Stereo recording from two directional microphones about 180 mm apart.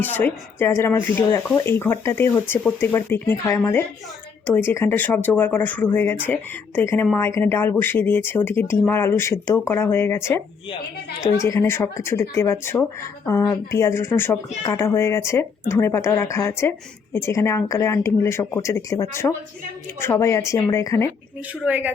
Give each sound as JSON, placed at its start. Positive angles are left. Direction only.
{"t": 0.0, "sound": "speech", "side_deg": 10}
{"t": 21.6, "sound": "speech", "side_deg": -10}